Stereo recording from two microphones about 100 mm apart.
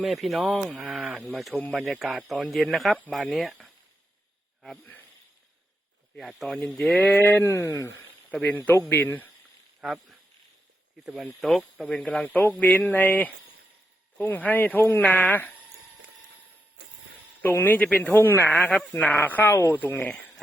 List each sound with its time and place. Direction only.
0.0 s speech: centre (ahead or behind)
6.1 s speech: centre (ahead or behind)
6.9 s speech: 15° left (ahead or behind)
8.3 s speech: 15° left (ahead or behind)
9.8 s speech: centre (ahead or behind); by 15.5 s 15° left (ahead or behind)
17.4 s speech: 20° left (ahead or behind)